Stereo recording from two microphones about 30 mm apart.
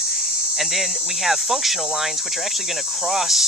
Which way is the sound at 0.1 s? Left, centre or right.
Centre.